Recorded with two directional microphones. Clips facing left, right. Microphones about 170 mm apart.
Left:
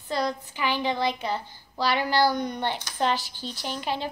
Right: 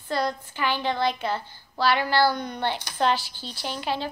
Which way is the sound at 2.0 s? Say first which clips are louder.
Even; 15° left (ahead or behind).